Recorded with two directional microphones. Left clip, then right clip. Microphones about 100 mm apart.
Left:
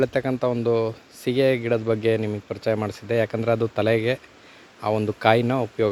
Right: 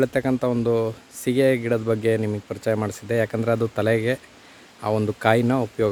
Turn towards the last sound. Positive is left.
turn(degrees=-20)  # may be behind; listen again after turning